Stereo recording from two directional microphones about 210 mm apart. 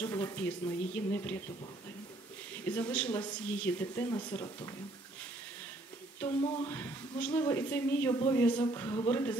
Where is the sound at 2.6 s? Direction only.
10° left (ahead or behind).